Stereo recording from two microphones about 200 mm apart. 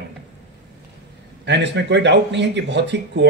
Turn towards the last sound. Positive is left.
turn(degrees=-60)  # may be behind; listen again after turning